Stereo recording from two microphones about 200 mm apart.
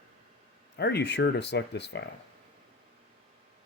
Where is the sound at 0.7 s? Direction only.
55° left (ahead or behind).